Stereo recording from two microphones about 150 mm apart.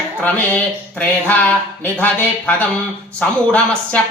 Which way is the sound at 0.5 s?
10° left (ahead or behind).